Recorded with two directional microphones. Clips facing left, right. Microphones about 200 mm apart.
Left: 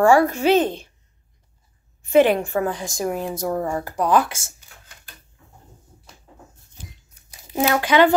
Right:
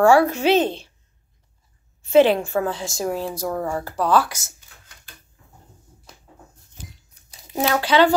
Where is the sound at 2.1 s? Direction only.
15° left (ahead or behind).